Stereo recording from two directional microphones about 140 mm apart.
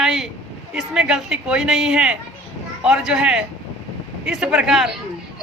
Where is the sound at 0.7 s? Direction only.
5° right (ahead or behind).